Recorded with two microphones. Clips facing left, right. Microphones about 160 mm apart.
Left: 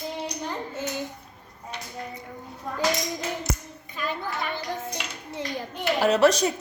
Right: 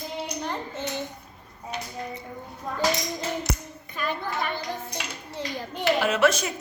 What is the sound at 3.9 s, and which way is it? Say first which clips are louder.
Speech: right 1 dB; 50° right (ahead or behind).